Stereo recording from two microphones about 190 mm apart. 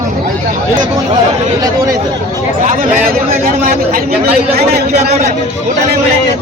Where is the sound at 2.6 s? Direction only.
40° right (ahead or behind); by 5.1 s 60° right (ahead or behind).